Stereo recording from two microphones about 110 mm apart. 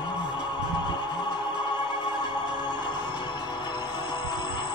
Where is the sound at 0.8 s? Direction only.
45° left (ahead or behind).